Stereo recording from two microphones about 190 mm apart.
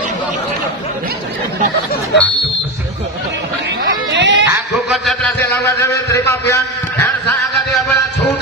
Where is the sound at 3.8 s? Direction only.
65° right (ahead or behind).